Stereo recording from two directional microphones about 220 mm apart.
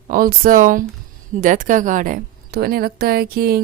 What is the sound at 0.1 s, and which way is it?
A woman's voice, 40° right (ahead or behind).